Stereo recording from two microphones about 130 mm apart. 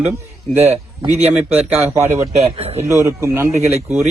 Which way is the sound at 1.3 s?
15° right (ahead or behind).